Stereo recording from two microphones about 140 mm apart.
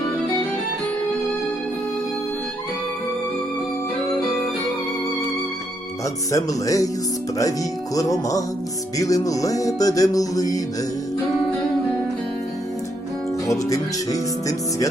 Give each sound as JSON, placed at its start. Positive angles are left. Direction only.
{"t": 6.3, "sound": "music", "side_deg": 25}
{"t": 7.9, "sound": "music", "side_deg": 25}
{"t": 13.5, "sound": "music", "side_deg": 25}